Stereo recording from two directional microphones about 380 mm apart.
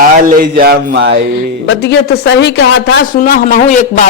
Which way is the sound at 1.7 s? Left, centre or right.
Left.